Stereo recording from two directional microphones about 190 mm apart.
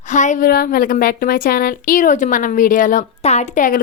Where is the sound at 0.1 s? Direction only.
40° left (ahead or behind).